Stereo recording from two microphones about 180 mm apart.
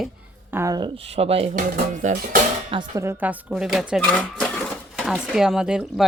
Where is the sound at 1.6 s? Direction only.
50° right (ahead or behind).